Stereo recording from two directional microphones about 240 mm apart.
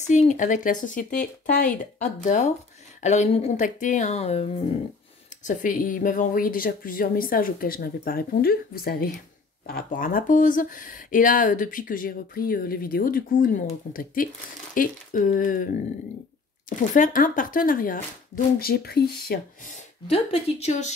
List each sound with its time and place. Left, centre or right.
0.0 s speech: left